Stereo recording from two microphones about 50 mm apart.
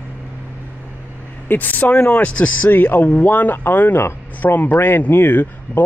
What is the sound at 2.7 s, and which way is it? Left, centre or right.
Speech, left.